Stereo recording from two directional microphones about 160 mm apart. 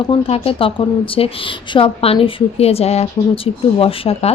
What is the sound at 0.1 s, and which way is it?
Speech, 35° left (ahead or behind).